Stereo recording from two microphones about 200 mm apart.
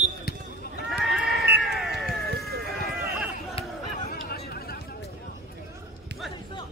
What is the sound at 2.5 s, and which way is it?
Run, 50° right (ahead or behind).